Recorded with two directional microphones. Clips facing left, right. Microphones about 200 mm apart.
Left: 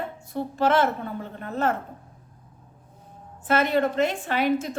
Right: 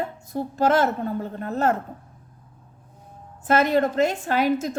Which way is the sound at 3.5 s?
40° right (ahead or behind).